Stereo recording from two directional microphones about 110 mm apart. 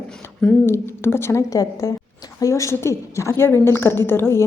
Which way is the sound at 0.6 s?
20° left (ahead or behind).